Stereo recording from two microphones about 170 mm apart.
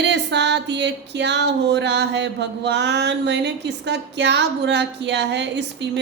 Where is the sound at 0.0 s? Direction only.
90° right.